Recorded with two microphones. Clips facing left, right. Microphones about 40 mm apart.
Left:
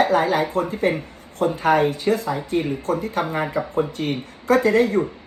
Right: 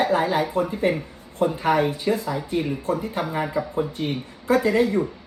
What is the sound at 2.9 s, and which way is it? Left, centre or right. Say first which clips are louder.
Speech: left 2 dB; left.